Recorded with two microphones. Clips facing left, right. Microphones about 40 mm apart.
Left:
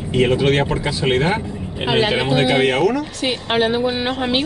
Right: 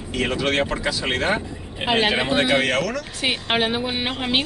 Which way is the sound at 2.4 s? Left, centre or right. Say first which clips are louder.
Left 4 dB; centre.